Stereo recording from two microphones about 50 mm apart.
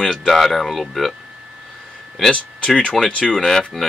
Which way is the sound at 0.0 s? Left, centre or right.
Centre.